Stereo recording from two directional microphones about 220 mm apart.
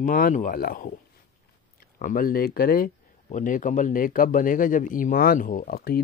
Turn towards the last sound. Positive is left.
turn(degrees=45)  # may be behind; listen again after turning